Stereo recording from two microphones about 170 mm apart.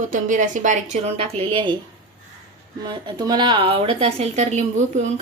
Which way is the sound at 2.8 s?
25° right (ahead or behind).